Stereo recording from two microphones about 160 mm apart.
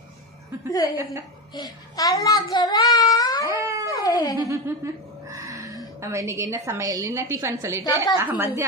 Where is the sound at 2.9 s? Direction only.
25° left (ahead or behind).